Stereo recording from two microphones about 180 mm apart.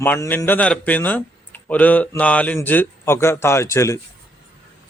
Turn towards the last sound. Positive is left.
turn(degrees=15)  # may be behind; listen again after turning